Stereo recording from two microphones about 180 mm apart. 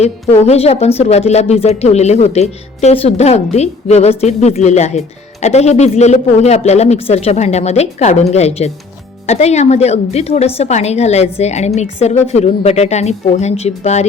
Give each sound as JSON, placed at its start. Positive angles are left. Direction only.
{"t": 0.0, "sound": "a woman's voice", "side_deg": 35}